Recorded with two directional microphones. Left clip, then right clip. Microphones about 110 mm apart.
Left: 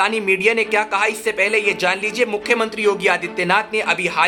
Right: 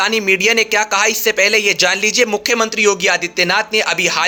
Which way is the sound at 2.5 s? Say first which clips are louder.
Right 4 dB; 20° right (ahead or behind).